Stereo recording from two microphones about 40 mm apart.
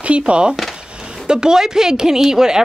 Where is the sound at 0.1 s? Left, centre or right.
Right.